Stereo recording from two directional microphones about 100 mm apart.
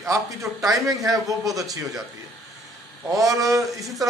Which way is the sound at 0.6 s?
35° right (ahead or behind).